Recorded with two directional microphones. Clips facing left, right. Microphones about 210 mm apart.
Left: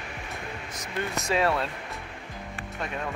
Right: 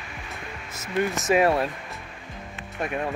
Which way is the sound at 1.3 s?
20° right (ahead or behind).